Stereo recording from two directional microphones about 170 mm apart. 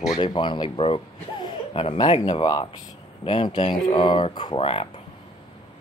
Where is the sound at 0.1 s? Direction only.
25° left (ahead or behind).